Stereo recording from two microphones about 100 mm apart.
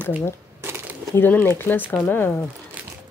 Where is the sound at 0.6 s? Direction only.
25° right (ahead or behind).